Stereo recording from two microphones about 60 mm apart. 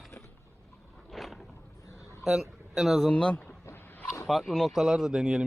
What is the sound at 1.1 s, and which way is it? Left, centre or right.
Boat, centre.